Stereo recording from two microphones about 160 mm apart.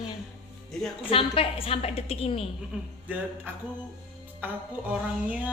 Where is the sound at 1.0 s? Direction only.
35° left (ahead or behind).